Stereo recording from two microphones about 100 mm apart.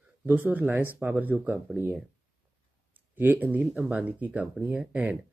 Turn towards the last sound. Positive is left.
turn(degrees=-15)  # may be behind; listen again after turning